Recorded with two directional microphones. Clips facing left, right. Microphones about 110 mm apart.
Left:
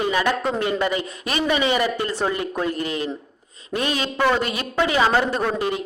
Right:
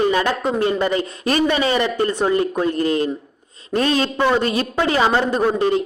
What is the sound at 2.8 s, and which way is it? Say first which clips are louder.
Speech: right 7 dB; 40° right (ahead or behind).